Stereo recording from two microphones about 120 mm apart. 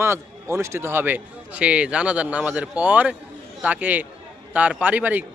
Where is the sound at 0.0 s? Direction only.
20° right (ahead or behind).